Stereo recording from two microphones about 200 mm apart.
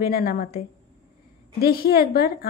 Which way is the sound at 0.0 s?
50° left (ahead or behind).